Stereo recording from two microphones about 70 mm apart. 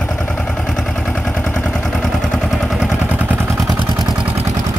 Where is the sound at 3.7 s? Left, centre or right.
Right.